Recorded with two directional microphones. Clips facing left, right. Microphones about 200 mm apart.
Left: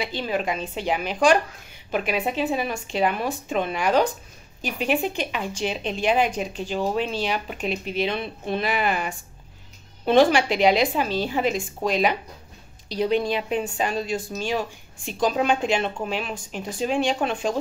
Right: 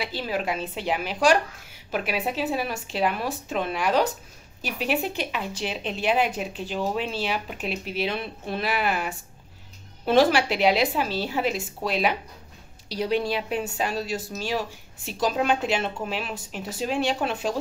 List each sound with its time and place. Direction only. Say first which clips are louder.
0.0 s a woman's voice: left 2 dB; 5° right (ahead or behind)